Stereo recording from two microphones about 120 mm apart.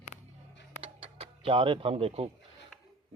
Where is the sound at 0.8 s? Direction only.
50° right (ahead or behind).